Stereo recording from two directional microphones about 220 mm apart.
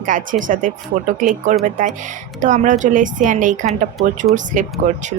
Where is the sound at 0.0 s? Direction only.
35° right (ahead or behind).